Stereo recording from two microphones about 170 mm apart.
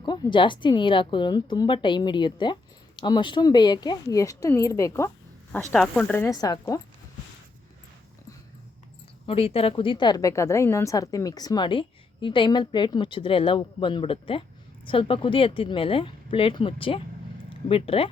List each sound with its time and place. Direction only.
0.0 s speech: 25° left (ahead or behind)
9.2 s speech: 35° left (ahead or behind)